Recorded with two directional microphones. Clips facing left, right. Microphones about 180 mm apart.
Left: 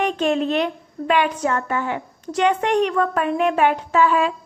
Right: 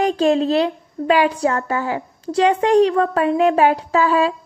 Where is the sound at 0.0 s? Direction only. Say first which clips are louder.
Right 4 dB; 35° right (ahead or behind).